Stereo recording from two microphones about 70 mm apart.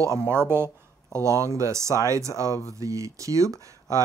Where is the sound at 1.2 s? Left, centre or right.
Right.